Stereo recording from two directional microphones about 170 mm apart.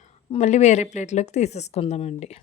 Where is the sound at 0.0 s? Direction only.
40° left (ahead or behind).